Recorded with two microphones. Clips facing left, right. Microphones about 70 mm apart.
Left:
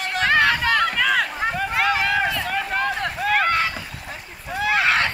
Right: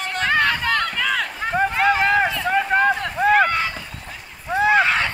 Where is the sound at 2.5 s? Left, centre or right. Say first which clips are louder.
Right 6 dB; right.